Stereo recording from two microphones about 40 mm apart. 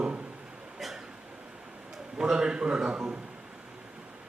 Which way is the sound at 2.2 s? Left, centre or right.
Centre.